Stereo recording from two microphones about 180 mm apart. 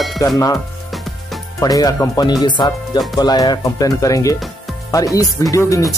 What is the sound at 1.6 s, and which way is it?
Speech, 20° left (ahead or behind).